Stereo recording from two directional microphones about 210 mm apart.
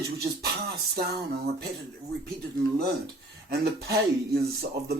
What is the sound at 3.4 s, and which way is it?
Speech, 50° right (ahead or behind).